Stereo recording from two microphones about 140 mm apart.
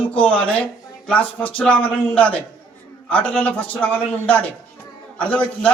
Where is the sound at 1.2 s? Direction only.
40° left (ahead or behind).